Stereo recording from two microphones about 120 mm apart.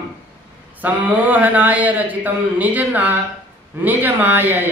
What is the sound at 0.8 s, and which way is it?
Speech, 15° right (ahead or behind).